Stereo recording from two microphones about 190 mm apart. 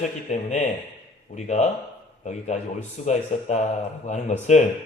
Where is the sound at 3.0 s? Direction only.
35° left (ahead or behind).